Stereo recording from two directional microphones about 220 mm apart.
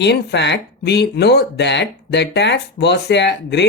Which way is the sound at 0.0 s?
50° left (ahead or behind).